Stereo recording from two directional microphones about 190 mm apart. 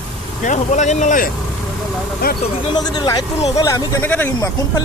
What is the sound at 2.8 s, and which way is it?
Speech, 20° left (ahead or behind).